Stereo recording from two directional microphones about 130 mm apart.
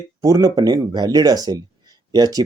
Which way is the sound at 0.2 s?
25° right (ahead or behind).